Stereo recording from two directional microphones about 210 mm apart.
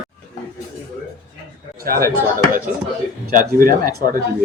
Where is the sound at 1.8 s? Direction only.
45° right (ahead or behind).